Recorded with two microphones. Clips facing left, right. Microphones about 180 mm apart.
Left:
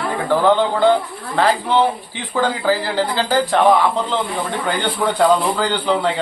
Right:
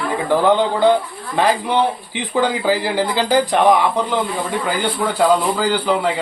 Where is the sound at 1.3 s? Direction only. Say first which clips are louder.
Even; 15° right (ahead or behind).